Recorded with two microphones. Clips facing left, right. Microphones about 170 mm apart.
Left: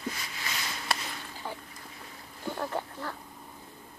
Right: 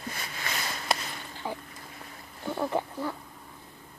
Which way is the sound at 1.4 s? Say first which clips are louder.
Right 4 dB; 10° right (ahead or behind).